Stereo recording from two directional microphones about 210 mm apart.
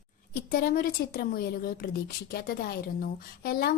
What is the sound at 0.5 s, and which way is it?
A woman's voice, 45° left (ahead or behind).